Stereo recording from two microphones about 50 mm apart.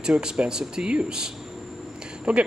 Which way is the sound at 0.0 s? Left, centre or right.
Centre.